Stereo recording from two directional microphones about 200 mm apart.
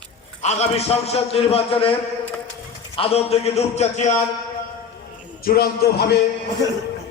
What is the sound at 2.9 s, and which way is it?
A man's voice, 30° left (ahead or behind).